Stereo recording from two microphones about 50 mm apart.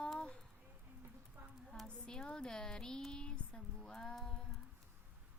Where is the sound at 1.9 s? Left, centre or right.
Centre.